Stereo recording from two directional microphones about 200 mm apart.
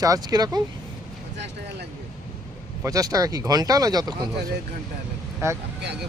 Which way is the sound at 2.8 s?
15° right (ahead or behind).